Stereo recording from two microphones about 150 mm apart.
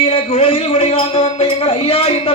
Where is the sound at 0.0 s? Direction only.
40° left (ahead or behind).